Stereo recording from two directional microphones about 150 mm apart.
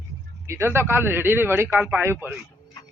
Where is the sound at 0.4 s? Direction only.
20° right (ahead or behind).